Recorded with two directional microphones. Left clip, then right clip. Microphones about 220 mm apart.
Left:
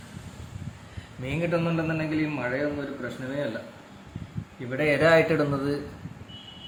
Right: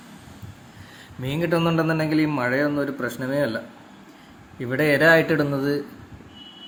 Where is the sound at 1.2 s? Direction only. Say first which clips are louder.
Right 4 dB; 20° right (ahead or behind).